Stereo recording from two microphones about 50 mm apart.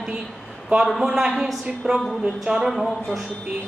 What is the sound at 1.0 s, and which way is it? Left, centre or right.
Speech, centre.